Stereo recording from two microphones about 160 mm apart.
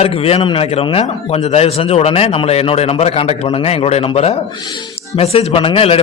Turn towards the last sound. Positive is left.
turn(degrees=35)  # may be behind; listen again after turning